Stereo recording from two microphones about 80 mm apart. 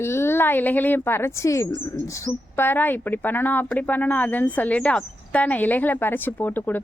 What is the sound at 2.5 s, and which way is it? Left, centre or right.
A woman's voice, left.